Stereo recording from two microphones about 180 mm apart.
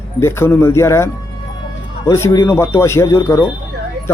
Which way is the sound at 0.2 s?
15° left (ahead or behind).